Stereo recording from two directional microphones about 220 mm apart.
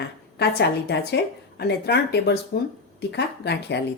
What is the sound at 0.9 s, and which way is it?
A woman's voice, 50° left (ahead or behind).